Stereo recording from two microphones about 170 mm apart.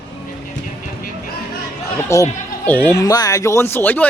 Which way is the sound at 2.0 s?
15° left (ahead or behind).